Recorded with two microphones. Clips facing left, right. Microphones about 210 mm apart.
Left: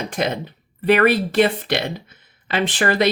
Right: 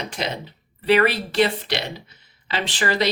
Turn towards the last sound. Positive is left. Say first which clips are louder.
# left 4 dB
turn(degrees=55)  # may be behind; listen again after turning